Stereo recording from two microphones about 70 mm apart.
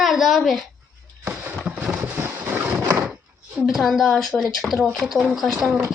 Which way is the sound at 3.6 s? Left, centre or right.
Centre.